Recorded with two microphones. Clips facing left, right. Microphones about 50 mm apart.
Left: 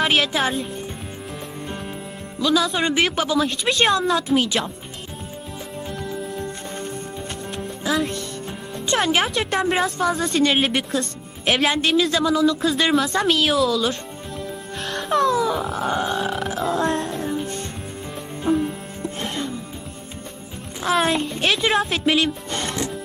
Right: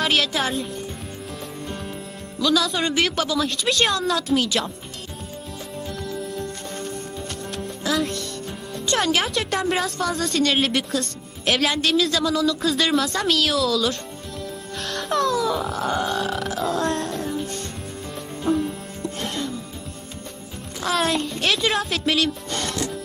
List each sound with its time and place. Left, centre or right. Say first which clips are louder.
0.0 s speech: left 2 dB; centre
2.4 s speech: left 1 dB; centre
3.2 s speech: left 1 dB; left
3.7 s speech: left 3 dB; centre
6.0 s music: left 1 dB; centre
8.7 s speech: left 1 dB; left
14.9 s music: left 3 dB; centre
15.4 s grunt: left 1 dB; centre
15.7 s speech: left 1 dB; centre
16.6 s grunt: left 2 dB; centre
16.8 s music: left 2 dB; centre
20.8 s speech: left 2 dB; centre
21.7 s speech: left 3 dB; centre; by 22.9 s left